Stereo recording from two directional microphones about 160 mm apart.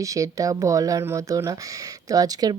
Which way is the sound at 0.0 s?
20° right (ahead or behind).